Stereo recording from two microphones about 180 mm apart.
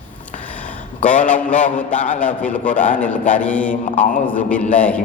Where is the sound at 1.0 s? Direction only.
45° left (ahead or behind).